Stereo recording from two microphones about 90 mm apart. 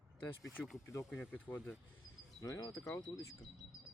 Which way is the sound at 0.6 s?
Centre (ahead or behind).